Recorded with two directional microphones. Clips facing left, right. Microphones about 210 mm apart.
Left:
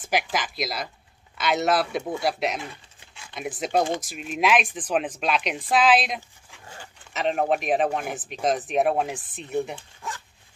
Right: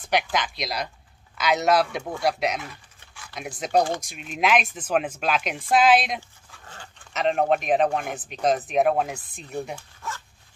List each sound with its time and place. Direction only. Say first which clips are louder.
0.0 s a woman's voice: right 2 dB; 5° left (ahead or behind)
2.7 s dog: left 1 dB; 25° left (ahead or behind)
3.3 s a woman's voice: right 1 dB; centre (ahead or behind)
6.5 s dog: left 1 dB; 10° left (ahead or behind)
7.2 s a woman's voice: right 2 dB; 5° left (ahead or behind)
9.8 s zipper: even; 15° left (ahead or behind)